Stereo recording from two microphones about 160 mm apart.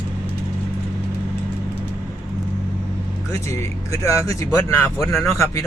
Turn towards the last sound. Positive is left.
turn(degrees=15)  # may be behind; listen again after turning